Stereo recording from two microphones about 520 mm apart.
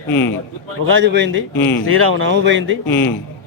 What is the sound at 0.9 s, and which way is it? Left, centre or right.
A man's voice, right.